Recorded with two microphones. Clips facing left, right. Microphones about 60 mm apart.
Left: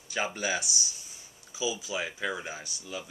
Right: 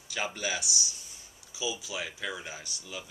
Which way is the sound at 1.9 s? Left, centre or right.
Left.